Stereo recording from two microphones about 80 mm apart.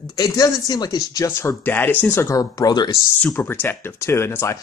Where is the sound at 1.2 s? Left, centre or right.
Left.